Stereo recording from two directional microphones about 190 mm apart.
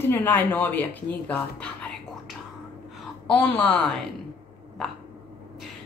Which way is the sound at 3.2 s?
5° left (ahead or behind).